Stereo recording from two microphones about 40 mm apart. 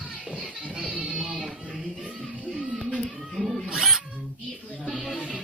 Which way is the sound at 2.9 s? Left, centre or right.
Centre.